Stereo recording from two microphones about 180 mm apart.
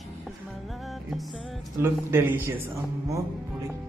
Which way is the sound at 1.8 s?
15° right (ahead or behind).